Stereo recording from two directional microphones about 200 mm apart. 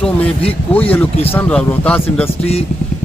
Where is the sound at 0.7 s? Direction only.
5° left (ahead or behind).